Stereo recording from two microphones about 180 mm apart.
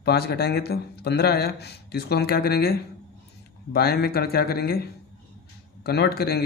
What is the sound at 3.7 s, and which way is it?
Speech, 60° left (ahead or behind).